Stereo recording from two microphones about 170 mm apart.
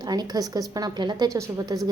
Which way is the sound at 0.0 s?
25° right (ahead or behind).